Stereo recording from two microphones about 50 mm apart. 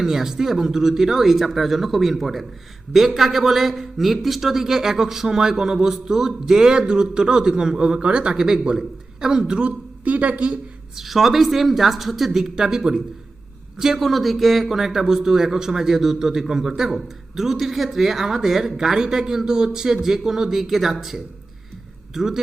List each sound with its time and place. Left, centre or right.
0.0 s a man's voice: centre; by 10.6 s right
10.9 s a man's voice: centre